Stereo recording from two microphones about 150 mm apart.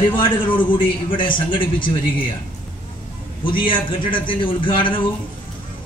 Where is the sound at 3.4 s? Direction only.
35° left (ahead or behind).